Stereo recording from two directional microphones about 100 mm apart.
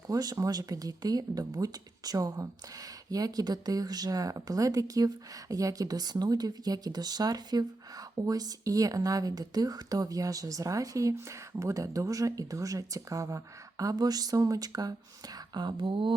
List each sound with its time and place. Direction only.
0.1 s speech: 40° right (ahead or behind); by 16.1 s 55° right (ahead or behind)